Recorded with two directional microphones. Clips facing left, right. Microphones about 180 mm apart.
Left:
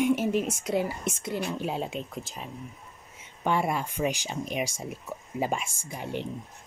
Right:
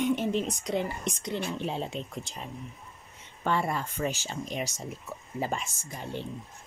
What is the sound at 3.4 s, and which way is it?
Speech, 15° left (ahead or behind).